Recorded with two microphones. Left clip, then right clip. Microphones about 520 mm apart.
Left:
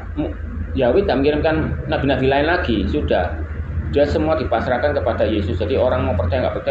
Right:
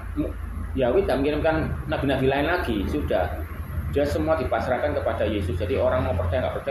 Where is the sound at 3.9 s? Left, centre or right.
Right.